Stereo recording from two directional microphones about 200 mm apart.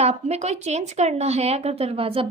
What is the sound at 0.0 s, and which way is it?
Speech, 35° right (ahead or behind).